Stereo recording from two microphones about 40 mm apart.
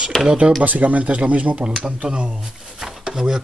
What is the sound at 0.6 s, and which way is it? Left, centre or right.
Speech, right.